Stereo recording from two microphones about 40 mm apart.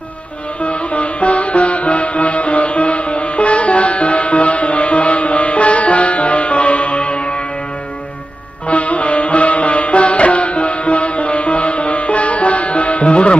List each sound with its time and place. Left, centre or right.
0.6 s music: left
8.6 s music: left